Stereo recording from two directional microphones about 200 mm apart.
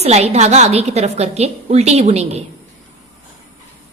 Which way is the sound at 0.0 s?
35° right (ahead or behind).